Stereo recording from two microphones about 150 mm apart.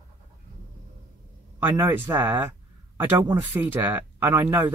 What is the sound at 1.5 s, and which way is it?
Speech, 15° right (ahead or behind).